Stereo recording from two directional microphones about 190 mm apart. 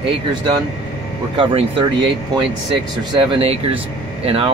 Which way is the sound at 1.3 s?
25° right (ahead or behind).